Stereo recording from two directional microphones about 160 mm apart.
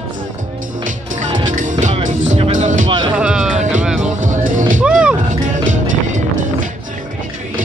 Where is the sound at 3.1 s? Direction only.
5° right (ahead or behind).